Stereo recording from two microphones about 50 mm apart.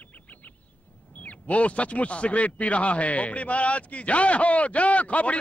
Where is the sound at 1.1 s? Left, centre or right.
Left.